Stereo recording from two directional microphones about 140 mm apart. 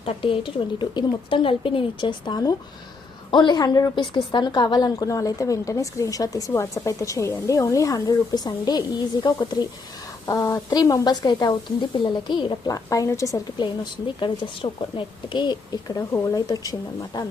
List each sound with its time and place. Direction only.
0.0 s a woman's voice: 40° left (ahead or behind)
10.2 s a woman's voice: 20° left (ahead or behind)
14.2 s speech: 35° left (ahead or behind)
16.0 s a woman's voice: 20° left (ahead or behind)